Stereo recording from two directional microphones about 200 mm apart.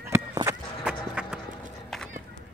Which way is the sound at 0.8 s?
5° right (ahead or behind).